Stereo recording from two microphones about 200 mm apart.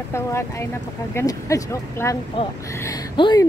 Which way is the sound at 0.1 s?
15° left (ahead or behind).